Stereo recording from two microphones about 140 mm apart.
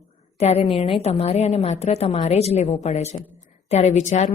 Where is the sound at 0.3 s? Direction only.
50° left (ahead or behind).